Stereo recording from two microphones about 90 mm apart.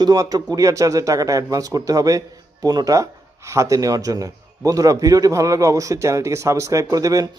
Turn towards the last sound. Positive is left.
turn(degrees=-40)  # may be behind; listen again after turning